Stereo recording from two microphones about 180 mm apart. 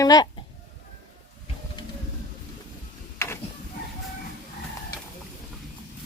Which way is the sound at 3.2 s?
15° left (ahead or behind).